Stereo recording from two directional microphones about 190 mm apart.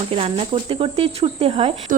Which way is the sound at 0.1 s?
30° right (ahead or behind).